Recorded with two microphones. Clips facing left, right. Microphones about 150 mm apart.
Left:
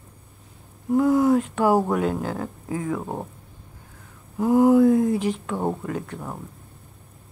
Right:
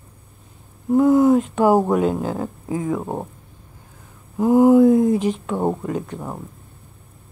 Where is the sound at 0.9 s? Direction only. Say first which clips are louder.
Right 4 dB; 20° right (ahead or behind).